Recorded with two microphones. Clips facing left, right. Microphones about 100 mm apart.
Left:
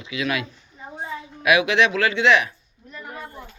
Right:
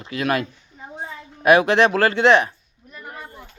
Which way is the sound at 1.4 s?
35° right (ahead or behind).